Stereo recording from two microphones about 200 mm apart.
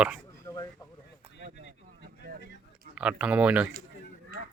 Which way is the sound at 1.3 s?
60° left (ahead or behind).